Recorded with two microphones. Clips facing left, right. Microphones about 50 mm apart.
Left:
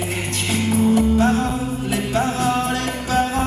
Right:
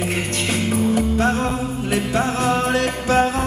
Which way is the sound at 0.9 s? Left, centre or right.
Right.